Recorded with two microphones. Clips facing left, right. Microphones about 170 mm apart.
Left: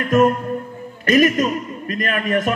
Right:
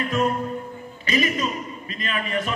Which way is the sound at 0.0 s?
50° left (ahead or behind).